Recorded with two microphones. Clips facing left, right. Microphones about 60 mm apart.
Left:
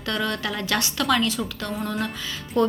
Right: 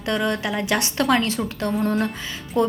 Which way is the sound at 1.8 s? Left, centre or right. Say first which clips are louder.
Right 5 dB; right.